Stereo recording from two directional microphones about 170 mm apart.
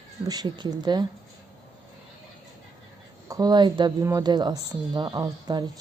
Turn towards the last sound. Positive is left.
turn(degrees=-25)  # may be behind; listen again after turning